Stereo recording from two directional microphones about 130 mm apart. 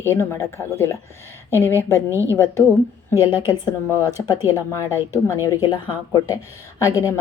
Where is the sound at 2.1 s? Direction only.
20° right (ahead or behind).